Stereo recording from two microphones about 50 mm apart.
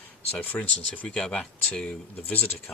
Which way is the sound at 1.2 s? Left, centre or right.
Centre.